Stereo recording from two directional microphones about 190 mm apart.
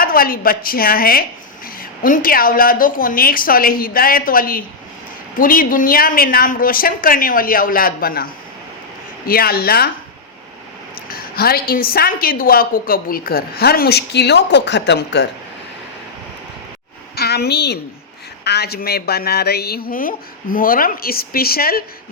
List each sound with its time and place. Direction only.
0.0 s a woman's voice: 50° left (ahead or behind)
10.9 s a woman's voice: 50° left (ahead or behind)
17.2 s a woman's voice: 60° left (ahead or behind)